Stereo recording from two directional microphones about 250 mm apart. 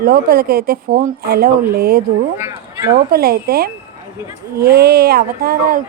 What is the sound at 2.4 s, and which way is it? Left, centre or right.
Speech, centre.